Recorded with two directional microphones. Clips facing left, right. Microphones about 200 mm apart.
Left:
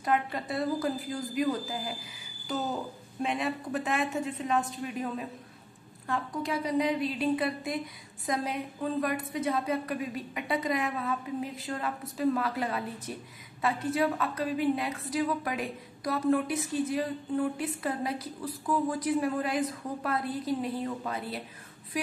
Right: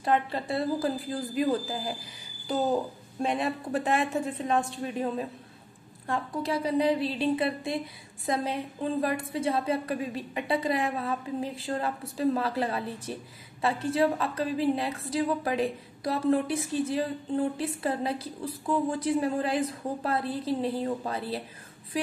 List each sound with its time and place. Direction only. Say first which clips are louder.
0.0 s a woman's voice: right 2 dB; 30° right (ahead or behind)
3.2 s a woman's voice: right 2 dB; 35° right (ahead or behind)
6.4 s a woman's voice: right 3 dB; 30° right (ahead or behind)